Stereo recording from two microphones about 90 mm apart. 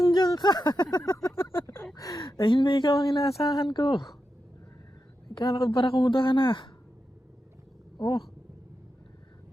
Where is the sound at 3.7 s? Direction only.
65° left (ahead or behind).